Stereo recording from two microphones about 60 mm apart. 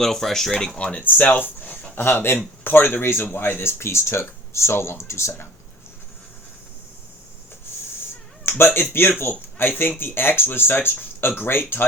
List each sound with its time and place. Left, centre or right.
0.0 s speech: centre
0.8 s speech: centre
2.0 s speech: left
8.4 s speech: left